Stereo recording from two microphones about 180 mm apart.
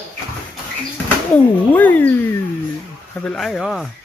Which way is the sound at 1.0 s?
10° left (ahead or behind).